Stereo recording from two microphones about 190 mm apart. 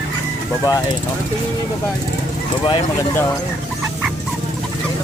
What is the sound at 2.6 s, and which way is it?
Speech, 25° left (ahead or behind).